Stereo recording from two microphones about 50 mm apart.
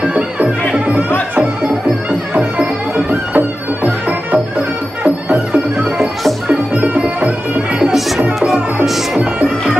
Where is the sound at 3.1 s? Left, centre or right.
Right.